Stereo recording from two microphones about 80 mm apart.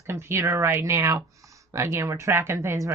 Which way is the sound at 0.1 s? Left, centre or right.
Right.